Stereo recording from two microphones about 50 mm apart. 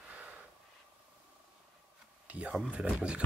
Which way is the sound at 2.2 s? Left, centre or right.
Right.